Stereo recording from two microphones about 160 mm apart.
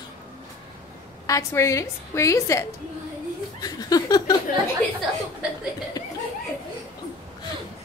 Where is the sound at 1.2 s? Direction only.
20° left (ahead or behind).